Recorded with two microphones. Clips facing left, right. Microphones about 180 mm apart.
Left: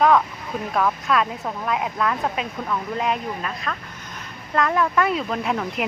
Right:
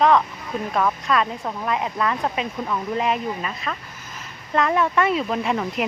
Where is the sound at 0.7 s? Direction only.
Centre (ahead or behind).